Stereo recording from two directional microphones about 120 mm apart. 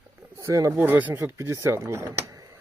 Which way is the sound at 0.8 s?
15° right (ahead or behind).